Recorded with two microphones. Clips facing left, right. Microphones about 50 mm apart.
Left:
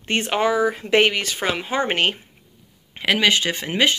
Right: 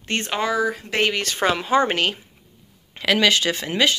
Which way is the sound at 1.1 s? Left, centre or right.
Centre.